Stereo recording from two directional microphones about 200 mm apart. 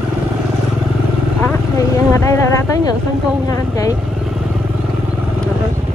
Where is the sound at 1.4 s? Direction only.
15° left (ahead or behind).